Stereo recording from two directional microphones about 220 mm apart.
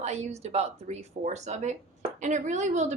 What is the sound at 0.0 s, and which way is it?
Speech, 30° right (ahead or behind).